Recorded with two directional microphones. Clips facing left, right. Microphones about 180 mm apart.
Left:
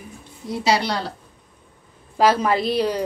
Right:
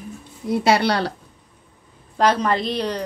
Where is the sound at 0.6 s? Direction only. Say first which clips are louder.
Right 2 dB; 60° right (ahead or behind).